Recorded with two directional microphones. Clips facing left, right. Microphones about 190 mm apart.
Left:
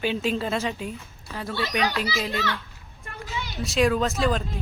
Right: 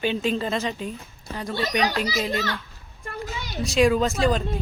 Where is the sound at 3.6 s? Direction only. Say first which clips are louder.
Right 3 dB; centre (ahead or behind).